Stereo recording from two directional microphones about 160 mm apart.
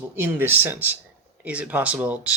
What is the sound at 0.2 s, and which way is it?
Speech, 15° right (ahead or behind).